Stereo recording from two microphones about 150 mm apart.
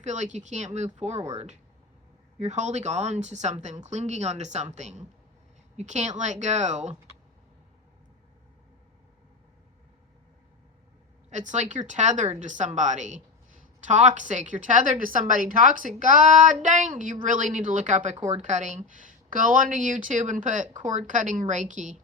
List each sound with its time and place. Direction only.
0.0 s speech: 50° right (ahead or behind)
2.4 s speech: 50° right (ahead or behind)
11.3 s a woman's voice: 50° right (ahead or behind)